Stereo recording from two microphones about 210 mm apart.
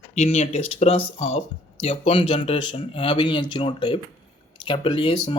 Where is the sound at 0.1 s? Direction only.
30° left (ahead or behind).